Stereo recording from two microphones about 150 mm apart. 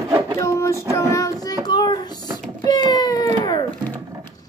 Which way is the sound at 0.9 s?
20° left (ahead or behind).